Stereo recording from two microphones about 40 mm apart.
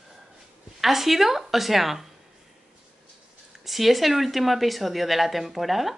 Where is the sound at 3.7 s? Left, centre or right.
Centre.